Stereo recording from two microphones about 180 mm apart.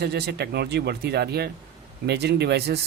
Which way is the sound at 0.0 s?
65° right (ahead or behind).